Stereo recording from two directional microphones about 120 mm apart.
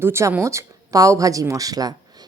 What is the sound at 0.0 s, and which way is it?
Speech, 20° right (ahead or behind).